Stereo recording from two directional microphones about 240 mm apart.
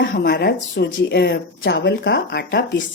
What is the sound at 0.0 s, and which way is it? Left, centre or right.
Speech, left.